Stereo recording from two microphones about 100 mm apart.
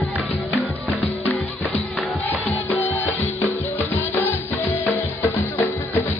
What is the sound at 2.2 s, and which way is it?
Music, 15° left (ahead or behind).